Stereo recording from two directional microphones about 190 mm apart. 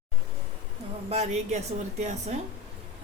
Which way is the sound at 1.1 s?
35° right (ahead or behind).